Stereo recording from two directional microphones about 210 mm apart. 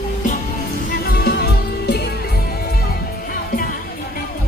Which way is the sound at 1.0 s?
50° left (ahead or behind).